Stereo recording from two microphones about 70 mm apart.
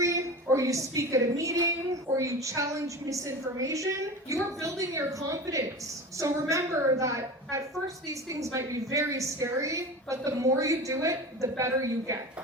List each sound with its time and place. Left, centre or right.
0.0 s a woman's voice: right